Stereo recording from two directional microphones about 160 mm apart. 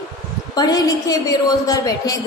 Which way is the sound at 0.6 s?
25° left (ahead or behind).